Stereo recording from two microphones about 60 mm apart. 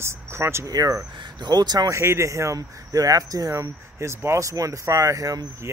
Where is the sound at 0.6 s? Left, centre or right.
Right.